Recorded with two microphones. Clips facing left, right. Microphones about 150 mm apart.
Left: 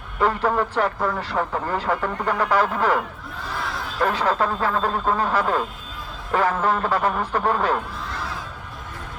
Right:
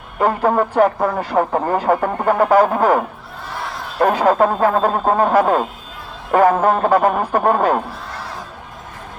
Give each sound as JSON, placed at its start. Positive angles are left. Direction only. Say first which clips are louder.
{"t": 0.2, "sound": "speech", "louder": "right 5 dB", "side_deg": -45}